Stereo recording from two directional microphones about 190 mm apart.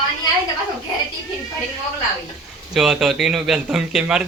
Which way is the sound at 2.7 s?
5° right (ahead or behind).